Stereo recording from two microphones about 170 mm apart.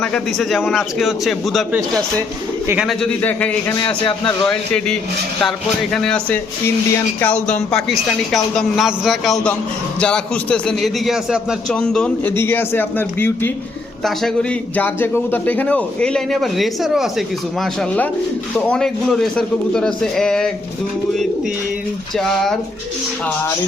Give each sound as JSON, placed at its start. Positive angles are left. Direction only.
{"t": 0.0, "sound": "speech", "side_deg": 0}
{"t": 2.6, "sound": "a man's voice", "side_deg": -5}
{"t": 3.8, "sound": "a man's voice", "side_deg": 30}
{"t": 4.4, "sound": "speech", "side_deg": 5}
{"t": 14.8, "sound": "a man's voice", "side_deg": 10}
{"t": 22.2, "sound": "speech", "side_deg": 5}